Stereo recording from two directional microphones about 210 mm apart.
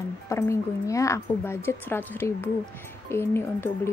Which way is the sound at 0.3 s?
15° left (ahead or behind).